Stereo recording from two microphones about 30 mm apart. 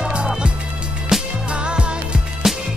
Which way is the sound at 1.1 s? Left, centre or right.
Centre.